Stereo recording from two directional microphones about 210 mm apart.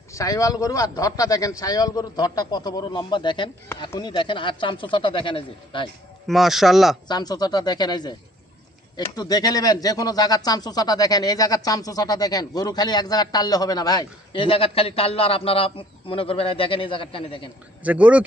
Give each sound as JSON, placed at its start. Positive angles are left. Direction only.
{"t": 0.1, "sound": "a man's voice", "side_deg": 15}
{"t": 6.2, "sound": "a man's voice", "side_deg": 0}
{"t": 7.1, "sound": "speech", "side_deg": 20}
{"t": 17.8, "sound": "speech", "side_deg": -5}